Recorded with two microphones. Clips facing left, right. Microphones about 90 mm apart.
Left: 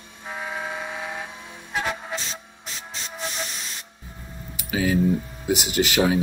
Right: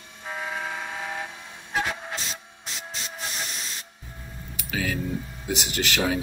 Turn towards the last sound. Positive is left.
turn(degrees=10)  # may be behind; listen again after turning